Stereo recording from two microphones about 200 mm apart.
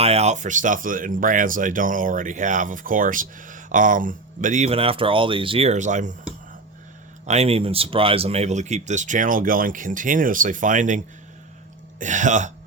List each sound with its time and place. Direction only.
0.0 s speech: 30° right (ahead or behind)
7.3 s speech: 30° right (ahead or behind)